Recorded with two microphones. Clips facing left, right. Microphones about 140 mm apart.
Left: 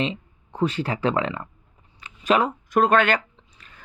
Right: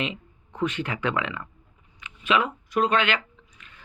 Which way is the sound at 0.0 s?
30° left (ahead or behind).